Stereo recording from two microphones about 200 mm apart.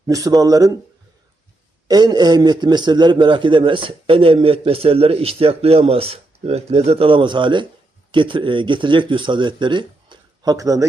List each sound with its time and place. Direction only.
0.1 s a man's voice: 15° right (ahead or behind)
1.9 s a man's voice: 20° right (ahead or behind)